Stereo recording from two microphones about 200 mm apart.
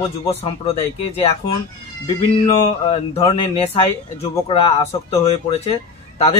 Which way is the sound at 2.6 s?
30° left (ahead or behind).